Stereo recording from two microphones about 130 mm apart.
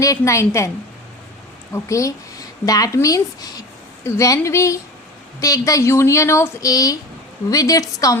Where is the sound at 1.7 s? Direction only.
25° left (ahead or behind).